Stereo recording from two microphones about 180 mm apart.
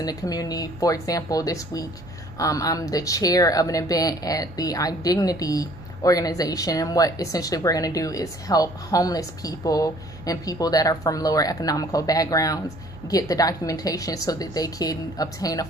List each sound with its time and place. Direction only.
0.0 s speech: 20° left (ahead or behind)